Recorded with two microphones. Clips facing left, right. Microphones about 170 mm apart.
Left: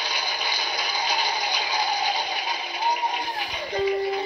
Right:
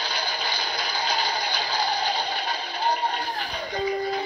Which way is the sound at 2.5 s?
15° left (ahead or behind).